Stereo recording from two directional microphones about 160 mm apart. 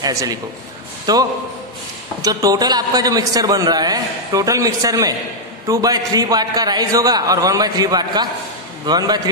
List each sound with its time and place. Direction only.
0.0 s a man's voice: 20° right (ahead or behind)